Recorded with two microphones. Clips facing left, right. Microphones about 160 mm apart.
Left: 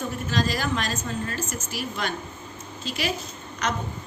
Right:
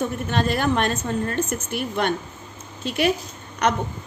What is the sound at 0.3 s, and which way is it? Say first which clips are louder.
A woman's voice: right 3 dB; 60° right (ahead or behind).